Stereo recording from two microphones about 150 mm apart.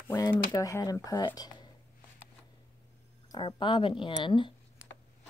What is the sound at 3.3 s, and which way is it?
Speech, 30° left (ahead or behind).